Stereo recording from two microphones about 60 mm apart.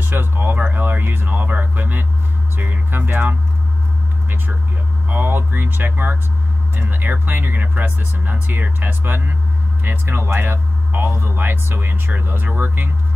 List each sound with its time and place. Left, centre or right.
0.0 s speech: right
5.0 s speech: right